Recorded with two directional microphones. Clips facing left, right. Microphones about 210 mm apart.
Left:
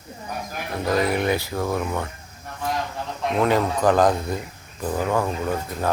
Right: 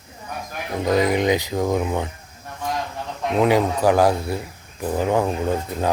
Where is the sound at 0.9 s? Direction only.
15° right (ahead or behind).